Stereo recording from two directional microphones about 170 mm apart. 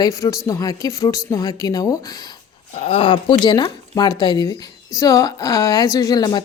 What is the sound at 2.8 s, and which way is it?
A woman's voice, 35° left (ahead or behind).